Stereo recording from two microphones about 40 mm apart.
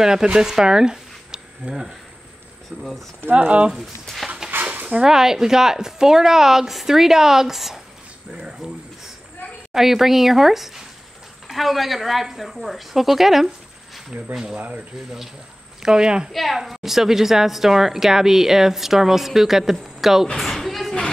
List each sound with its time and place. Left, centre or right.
0.0 s speech: centre
2.7 s speech: right
3.7 s speech: centre
4.5 s a sound: right
5.0 s a woman's voice: centre
8.3 s speech: right
9.8 s a woman's voice: centre
15.8 s a woman's voice: centre
16.3 s a woman's voice: centre
20.3 s a sound: centre